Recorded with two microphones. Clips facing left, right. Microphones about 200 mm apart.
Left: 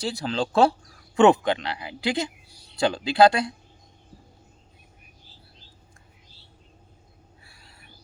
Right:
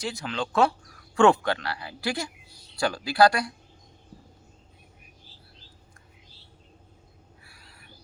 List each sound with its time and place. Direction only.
0.0 s speech: 35° left (ahead or behind)
1.1 s speech: 20° left (ahead or behind)
7.4 s cricket: 25° left (ahead or behind)